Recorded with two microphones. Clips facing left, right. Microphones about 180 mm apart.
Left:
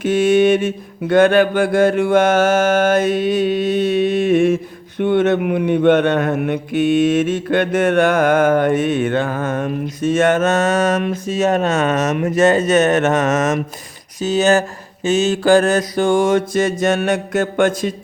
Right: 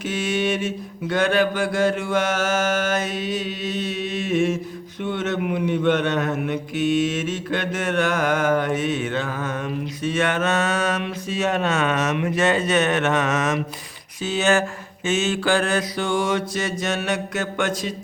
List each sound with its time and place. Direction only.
0.0 s mantra: 55° left (ahead or behind)
14.2 s speech: 40° left (ahead or behind)
15.0 s mantra: 35° left (ahead or behind)